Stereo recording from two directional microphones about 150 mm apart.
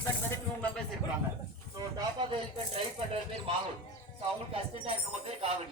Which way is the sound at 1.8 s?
25° right (ahead or behind).